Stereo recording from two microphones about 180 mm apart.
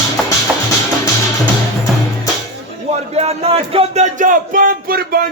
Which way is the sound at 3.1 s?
35° right (ahead or behind).